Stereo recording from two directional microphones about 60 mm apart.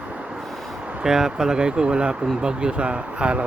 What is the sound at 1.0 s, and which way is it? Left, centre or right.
Speech, centre.